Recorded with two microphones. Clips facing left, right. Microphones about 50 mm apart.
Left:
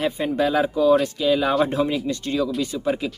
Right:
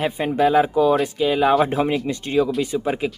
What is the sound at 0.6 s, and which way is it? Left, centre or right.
Speech, right.